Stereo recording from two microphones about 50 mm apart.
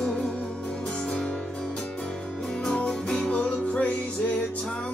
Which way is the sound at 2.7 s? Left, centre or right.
Centre.